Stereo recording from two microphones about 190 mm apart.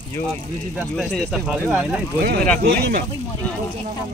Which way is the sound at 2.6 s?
55° right (ahead or behind).